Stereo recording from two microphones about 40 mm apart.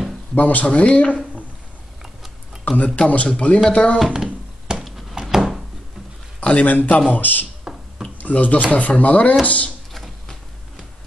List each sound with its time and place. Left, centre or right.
0.3 s speech: left
0.7 s speech: left
2.7 s a man's voice: left
3.0 s speech: left
4.1 s a sound: centre
6.6 s speech: left
7.7 s finger snapping: centre
8.2 s speech: left
9.9 s a sound: centre